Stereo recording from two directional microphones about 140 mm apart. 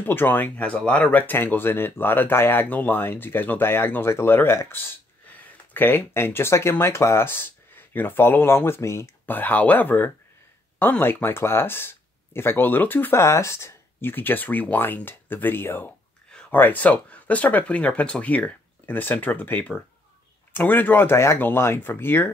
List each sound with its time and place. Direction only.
0.0 s speech: 15° left (ahead or behind)